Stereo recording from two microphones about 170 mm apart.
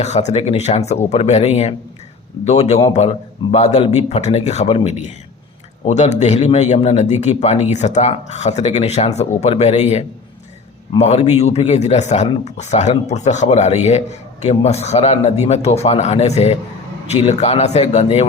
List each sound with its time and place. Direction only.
0.0 s a man's voice: 40° left (ahead or behind)